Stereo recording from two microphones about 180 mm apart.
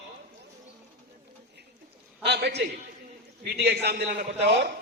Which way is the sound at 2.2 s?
70° right (ahead or behind).